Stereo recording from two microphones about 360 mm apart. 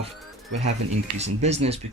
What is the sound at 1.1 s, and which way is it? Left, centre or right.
Speech, centre.